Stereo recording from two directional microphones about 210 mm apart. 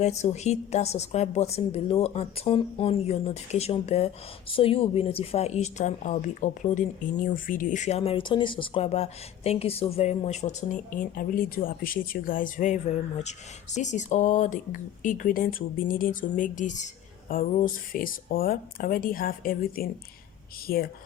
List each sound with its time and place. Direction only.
0.0 s speech: 30° left (ahead or behind)
11.2 s speech: 45° left (ahead or behind)